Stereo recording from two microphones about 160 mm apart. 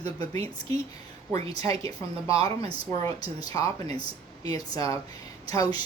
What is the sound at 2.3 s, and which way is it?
Speech, 35° right (ahead or behind).